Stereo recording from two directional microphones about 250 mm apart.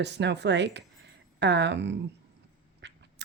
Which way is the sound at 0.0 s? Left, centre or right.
Right.